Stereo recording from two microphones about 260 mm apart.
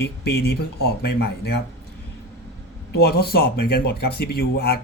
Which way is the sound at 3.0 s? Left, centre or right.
Left.